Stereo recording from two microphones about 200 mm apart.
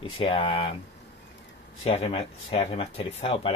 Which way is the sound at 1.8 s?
30° left (ahead or behind).